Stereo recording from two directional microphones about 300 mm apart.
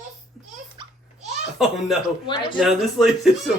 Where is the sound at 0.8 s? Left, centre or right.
Centre.